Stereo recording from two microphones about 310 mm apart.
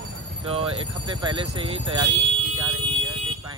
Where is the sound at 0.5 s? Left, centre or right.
Centre.